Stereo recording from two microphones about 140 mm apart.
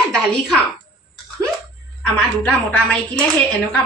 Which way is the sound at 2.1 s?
10° left (ahead or behind).